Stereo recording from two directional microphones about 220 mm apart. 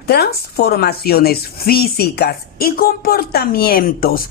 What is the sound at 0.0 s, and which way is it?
Speech, 45° left (ahead or behind).